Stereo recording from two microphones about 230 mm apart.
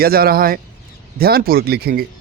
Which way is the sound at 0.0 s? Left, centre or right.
Right.